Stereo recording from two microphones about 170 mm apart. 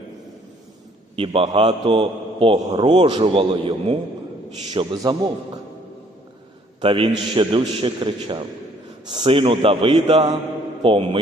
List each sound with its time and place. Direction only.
1.1 s a man's voice: 35° right (ahead or behind)
6.8 s a man's voice: 30° right (ahead or behind)